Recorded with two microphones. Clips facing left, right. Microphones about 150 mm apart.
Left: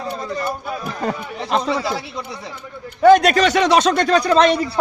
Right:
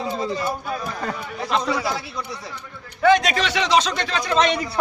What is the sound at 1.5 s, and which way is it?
Speech, 35° left (ahead or behind).